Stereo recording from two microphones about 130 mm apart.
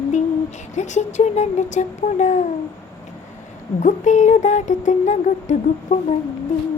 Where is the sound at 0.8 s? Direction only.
70° left (ahead or behind).